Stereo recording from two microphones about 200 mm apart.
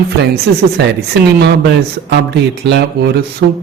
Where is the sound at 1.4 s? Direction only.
60° right (ahead or behind).